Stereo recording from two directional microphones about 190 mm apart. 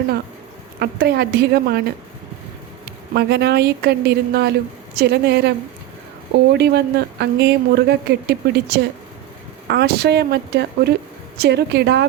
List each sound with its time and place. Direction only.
0.8 s speech: 55° right (ahead or behind)
3.2 s speech: 60° right (ahead or behind)
6.5 s speech: 60° right (ahead or behind)